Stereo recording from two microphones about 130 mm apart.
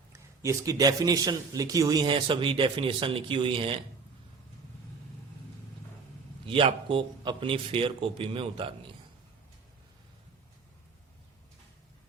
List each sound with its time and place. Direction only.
0.1 s a man's voice: 25° right (ahead or behind); by 3.8 s 40° right (ahead or behind)
6.4 s a man's voice: 40° right (ahead or behind)